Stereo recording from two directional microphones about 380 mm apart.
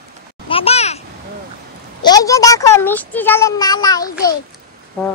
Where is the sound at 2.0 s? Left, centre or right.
Centre.